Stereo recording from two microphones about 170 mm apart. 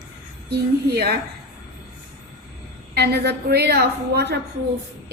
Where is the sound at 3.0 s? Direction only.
70° right (ahead or behind).